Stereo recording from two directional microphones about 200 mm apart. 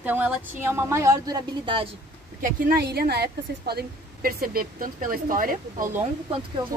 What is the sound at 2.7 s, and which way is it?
A woman's voice, 50° right (ahead or behind).